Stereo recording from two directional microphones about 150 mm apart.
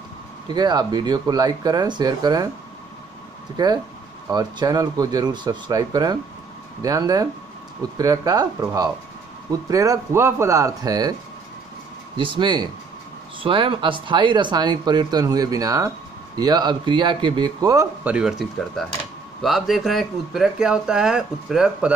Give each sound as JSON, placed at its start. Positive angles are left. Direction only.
{"t": 0.5, "sound": "speech", "side_deg": -30}
{"t": 3.5, "sound": "speech", "side_deg": -25}
{"t": 12.2, "sound": "speech", "side_deg": -30}
{"t": 18.0, "sound": "speech", "side_deg": -5}